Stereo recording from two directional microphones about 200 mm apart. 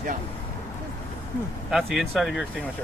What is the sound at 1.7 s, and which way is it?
Speech, centre (ahead or behind).